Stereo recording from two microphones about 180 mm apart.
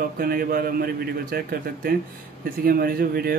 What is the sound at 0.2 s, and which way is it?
Speech, 55° right (ahead or behind).